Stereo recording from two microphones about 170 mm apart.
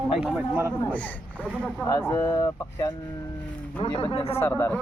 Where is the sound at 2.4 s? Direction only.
25° left (ahead or behind).